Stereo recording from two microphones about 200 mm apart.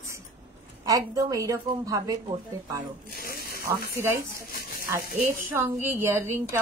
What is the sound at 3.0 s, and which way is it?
Speech, 50° left (ahead or behind).